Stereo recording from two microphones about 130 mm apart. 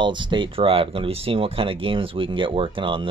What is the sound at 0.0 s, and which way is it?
Speech, 35° right (ahead or behind).